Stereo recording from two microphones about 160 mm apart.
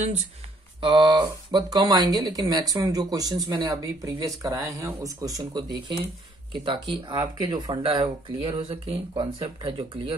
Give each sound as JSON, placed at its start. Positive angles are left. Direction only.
{"t": 0.7, "sound": "speech", "side_deg": -30}